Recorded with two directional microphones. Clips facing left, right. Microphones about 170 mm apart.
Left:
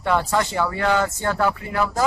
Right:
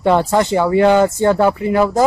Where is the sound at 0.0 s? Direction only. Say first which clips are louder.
Right 7 dB; 25° right (ahead or behind).